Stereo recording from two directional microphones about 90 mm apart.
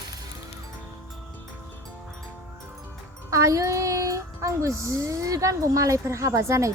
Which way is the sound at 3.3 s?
35° right (ahead or behind).